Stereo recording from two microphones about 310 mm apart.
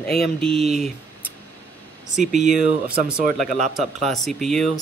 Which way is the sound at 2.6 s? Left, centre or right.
Right.